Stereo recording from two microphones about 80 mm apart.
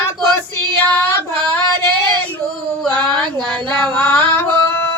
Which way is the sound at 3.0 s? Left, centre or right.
Centre.